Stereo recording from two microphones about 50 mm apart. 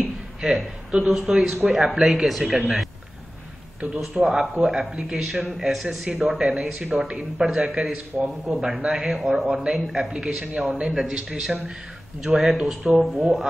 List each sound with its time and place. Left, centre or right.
0.4 s speech: centre
4.0 s speech: centre
9.5 s speech: centre
10.9 s speech: centre